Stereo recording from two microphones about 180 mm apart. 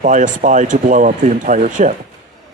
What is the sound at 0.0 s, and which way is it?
Speech, 45° right (ahead or behind).